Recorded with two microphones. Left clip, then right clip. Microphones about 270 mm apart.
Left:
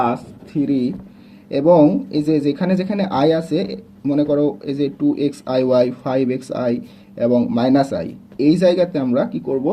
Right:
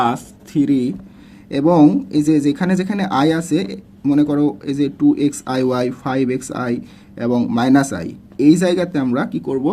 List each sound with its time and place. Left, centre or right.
0.6 s speech: right